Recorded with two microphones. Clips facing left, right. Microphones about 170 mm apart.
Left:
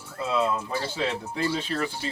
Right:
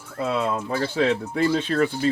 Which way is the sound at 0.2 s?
60° right (ahead or behind).